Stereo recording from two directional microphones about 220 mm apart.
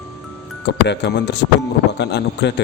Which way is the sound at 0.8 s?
50° left (ahead or behind).